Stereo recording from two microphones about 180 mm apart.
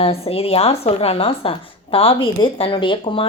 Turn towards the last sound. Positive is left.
turn(degrees=25)  # may be behind; listen again after turning